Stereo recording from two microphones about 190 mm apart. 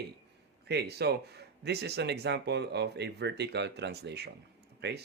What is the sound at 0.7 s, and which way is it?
Speech, 60° right (ahead or behind).